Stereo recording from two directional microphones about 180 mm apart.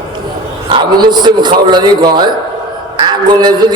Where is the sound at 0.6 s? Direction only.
25° right (ahead or behind).